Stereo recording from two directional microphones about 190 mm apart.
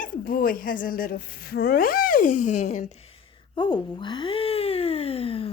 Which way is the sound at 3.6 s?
25° left (ahead or behind).